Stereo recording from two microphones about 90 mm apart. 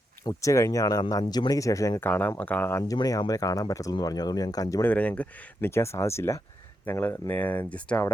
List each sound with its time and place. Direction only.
0.3 s speech: 35° left (ahead or behind)
2.0 s speech: 20° left (ahead or behind)
2.8 s speech: 45° left (ahead or behind)
4.8 s speech: 15° left (ahead or behind)